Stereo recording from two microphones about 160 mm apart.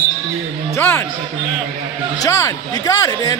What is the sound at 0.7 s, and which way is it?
Speech, 15° left (ahead or behind).